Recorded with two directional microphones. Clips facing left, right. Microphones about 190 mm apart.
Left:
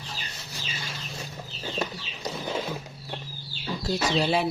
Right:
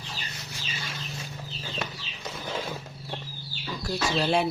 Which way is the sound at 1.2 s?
40° left (ahead or behind).